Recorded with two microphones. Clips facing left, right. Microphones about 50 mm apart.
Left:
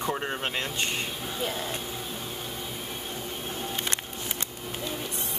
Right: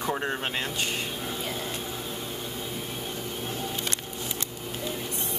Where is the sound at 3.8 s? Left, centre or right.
Left.